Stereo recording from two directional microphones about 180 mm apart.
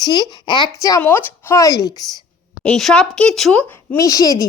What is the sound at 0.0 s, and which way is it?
Speech, 25° left (ahead or behind).